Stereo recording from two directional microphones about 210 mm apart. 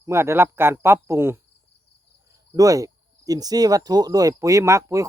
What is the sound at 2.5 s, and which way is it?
Speech, 15° right (ahead or behind).